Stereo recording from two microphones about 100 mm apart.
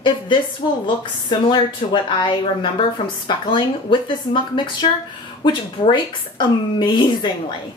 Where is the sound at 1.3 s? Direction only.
50° left (ahead or behind).